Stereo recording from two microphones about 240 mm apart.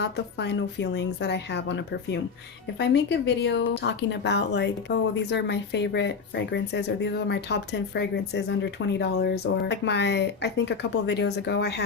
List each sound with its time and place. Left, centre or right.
0.0 s speech: left